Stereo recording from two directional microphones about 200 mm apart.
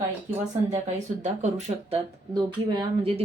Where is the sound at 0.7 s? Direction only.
35° right (ahead or behind).